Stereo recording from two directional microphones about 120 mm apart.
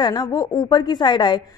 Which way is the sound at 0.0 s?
35° left (ahead or behind).